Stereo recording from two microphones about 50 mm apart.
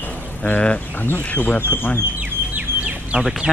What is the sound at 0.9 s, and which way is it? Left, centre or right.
Speech, left.